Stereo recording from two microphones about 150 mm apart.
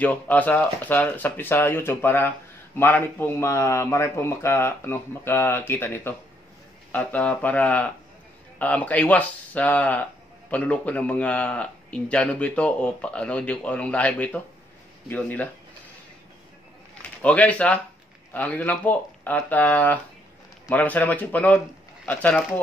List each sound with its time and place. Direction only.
0.0 s a man's voice: 10° left (ahead or behind)
17.2 s a man's voice: 10° left (ahead or behind)